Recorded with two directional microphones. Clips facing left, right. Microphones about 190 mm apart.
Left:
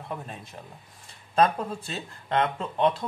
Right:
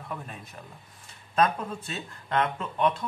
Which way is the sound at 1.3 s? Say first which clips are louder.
Left 2 dB; 30° left (ahead or behind).